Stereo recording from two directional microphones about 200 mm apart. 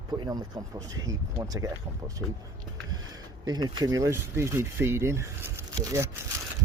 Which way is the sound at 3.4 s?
20° right (ahead or behind).